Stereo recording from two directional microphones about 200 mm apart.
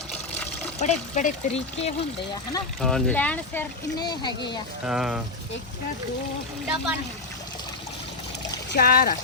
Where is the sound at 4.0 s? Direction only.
20° left (ahead or behind).